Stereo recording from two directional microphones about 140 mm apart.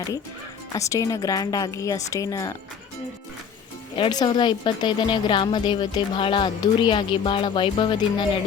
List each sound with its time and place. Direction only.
0.7 s speech: 20° left (ahead or behind)
3.9 s a woman's voice: 35° left (ahead or behind)